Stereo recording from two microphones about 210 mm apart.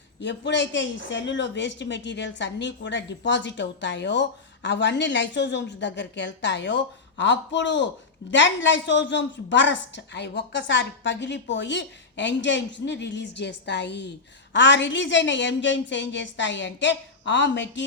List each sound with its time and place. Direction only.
0.2 s a woman's voice: 55° left (ahead or behind)